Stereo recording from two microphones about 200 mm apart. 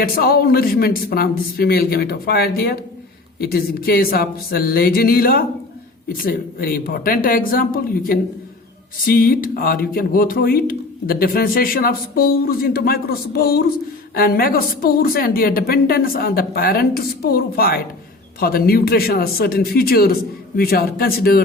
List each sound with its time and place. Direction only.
0.0 s speech: 50° left (ahead or behind)